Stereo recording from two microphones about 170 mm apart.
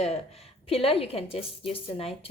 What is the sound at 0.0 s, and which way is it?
A woman's voice, 35° left (ahead or behind).